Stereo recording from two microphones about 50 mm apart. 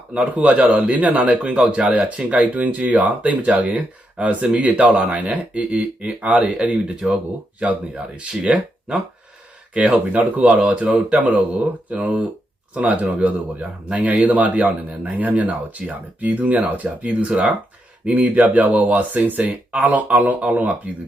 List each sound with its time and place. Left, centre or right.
0.3 s speech: right
6.6 s speech: centre
9.7 s speech: right
10.6 s speech: right